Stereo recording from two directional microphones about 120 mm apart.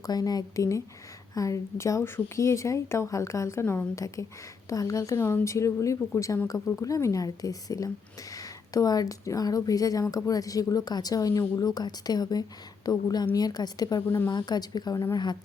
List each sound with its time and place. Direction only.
0.0 s a woman's voice: 30° left (ahead or behind)